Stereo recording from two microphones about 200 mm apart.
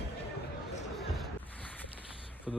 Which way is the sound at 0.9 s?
Centre (ahead or behind).